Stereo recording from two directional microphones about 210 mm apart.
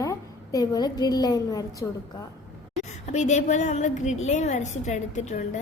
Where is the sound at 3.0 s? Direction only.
35° left (ahead or behind).